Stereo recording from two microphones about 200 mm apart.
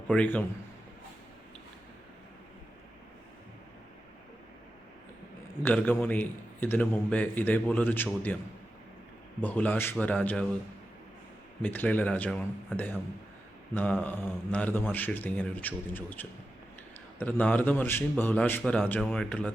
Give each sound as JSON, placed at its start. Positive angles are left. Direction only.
{"t": 0.1, "sound": "a man's voice", "side_deg": 5}
{"t": 5.6, "sound": "a man's voice", "side_deg": 10}
{"t": 9.4, "sound": "a man's voice", "side_deg": 10}
{"t": 11.6, "sound": "a man's voice", "side_deg": 10}